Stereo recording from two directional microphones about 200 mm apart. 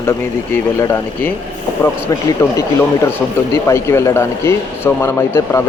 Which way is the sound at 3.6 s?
15° left (ahead or behind).